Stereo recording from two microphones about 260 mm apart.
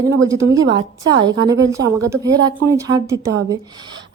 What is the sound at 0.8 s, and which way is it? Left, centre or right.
Speech, centre.